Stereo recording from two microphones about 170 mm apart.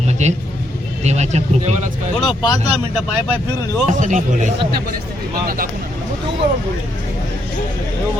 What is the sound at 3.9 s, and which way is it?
Speech, 45° right (ahead or behind).